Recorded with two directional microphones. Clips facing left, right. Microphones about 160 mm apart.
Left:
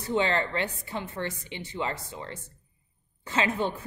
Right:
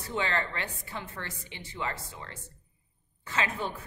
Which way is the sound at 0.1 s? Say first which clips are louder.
Left 5 dB; 25° left (ahead or behind).